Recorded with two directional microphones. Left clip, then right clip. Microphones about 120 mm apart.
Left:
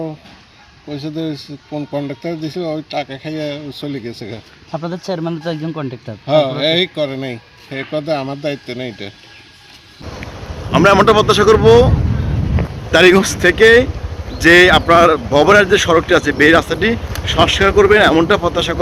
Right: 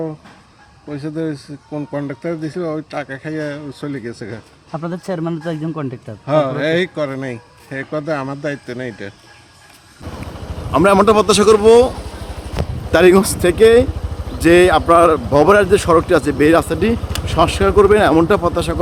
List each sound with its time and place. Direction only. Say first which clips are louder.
0.9 s speech: even; 10° right (ahead or behind)
4.8 s speech: left 1 dB; 80° left
6.2 s speech: left 2 dB; 15° right (ahead or behind)
7.1 s speech: left 1 dB; centre (ahead or behind)
10.7 s speech: left 2 dB; 10° right (ahead or behind)
12.9 s speech: left 1 dB; 10° right (ahead or behind)